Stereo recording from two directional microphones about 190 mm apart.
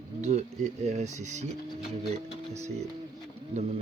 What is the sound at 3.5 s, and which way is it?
Speech, 35° right (ahead or behind).